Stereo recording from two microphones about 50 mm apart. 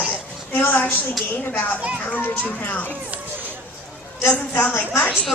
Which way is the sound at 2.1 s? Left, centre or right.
Left.